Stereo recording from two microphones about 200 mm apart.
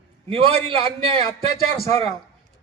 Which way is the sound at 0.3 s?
25° right (ahead or behind).